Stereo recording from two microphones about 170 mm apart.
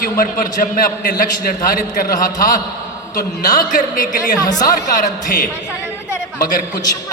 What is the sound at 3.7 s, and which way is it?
A man's voice, 50° left (ahead or behind).